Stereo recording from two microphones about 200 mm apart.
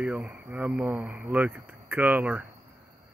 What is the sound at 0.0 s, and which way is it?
Speech, 5° right (ahead or behind).